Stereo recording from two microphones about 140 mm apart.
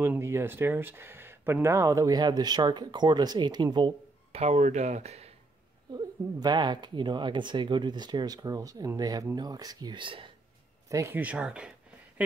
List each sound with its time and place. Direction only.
0.0 s speech: 20° right (ahead or behind); by 4.4 s 35° right (ahead or behind)
4.4 s speech: 55° right (ahead or behind)
5.9 s speech: 30° right (ahead or behind)
10.9 s speech: 20° right (ahead or behind)
11.1 s speech: 10° right (ahead or behind)